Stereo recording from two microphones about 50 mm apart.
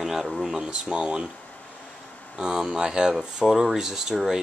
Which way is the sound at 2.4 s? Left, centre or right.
Centre.